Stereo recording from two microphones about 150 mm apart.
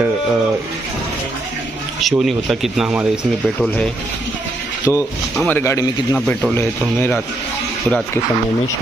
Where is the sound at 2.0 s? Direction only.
Centre (ahead or behind).